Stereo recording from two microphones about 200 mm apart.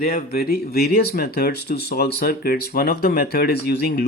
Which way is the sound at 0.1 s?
50° left (ahead or behind).